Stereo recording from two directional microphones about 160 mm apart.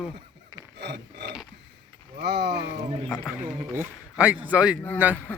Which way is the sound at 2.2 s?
90° right.